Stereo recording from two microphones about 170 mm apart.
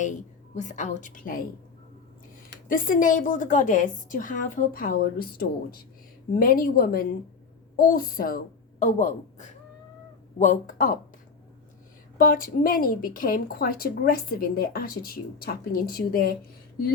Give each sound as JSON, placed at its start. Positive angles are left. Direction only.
{"t": 0.0, "sound": "a woman's voice", "side_deg": 45}
{"t": 2.6, "sound": "a woman's voice", "side_deg": 55}
{"t": 8.8, "sound": "a man's voice", "side_deg": 45}
{"t": 12.1, "sound": "a woman's voice", "side_deg": 55}